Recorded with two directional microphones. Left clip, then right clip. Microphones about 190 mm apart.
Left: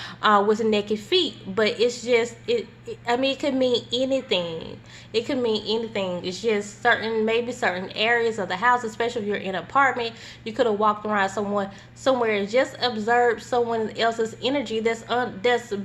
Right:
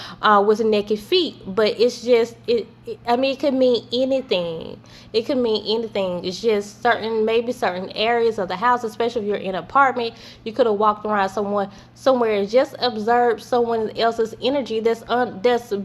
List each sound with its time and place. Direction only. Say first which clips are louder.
0.0 s a woman's voice: right 3 dB; 30° right (ahead or behind)